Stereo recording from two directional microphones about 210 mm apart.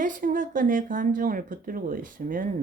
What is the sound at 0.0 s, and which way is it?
Speech, 40° right (ahead or behind).